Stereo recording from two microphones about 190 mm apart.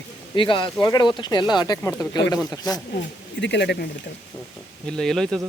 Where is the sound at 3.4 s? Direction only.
65° left (ahead or behind).